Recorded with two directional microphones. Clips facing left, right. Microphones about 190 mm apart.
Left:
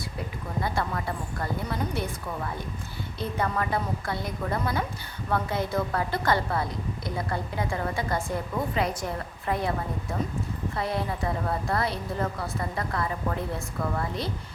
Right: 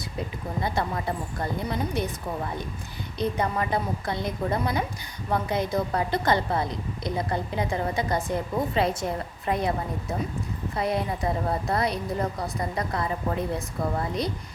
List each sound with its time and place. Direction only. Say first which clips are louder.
0.6 s a woman's voice: right 2 dB; 20° right (ahead or behind)